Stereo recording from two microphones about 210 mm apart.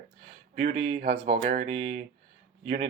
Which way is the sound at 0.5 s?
30° right (ahead or behind).